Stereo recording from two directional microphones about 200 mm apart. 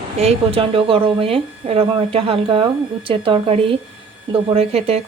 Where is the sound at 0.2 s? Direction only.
30° right (ahead or behind).